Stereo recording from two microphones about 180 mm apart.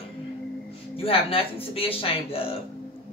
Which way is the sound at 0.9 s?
30° left (ahead or behind).